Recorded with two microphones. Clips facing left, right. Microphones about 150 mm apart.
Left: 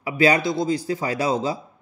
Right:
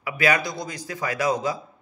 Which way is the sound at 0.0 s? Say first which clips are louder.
Left 4 dB; 30° left (ahead or behind).